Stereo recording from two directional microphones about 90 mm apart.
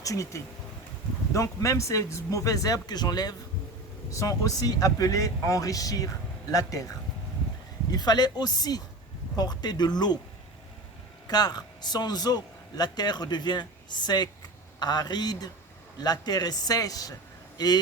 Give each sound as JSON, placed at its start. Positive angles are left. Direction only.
{"t": 0.0, "sound": "speech", "side_deg": 40}
{"t": 4.1, "sound": "a man's voice", "side_deg": 35}
{"t": 11.3, "sound": "a man's voice", "side_deg": 50}